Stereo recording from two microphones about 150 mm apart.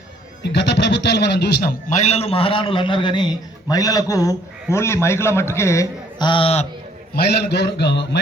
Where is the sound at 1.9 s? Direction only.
45° left (ahead or behind); by 6.3 s 20° left (ahead or behind).